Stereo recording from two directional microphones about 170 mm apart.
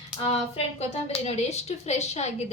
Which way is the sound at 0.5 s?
40° left (ahead or behind).